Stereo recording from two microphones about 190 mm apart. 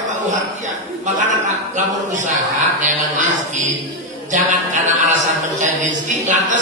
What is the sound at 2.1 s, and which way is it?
A man's voice, 40° right (ahead or behind).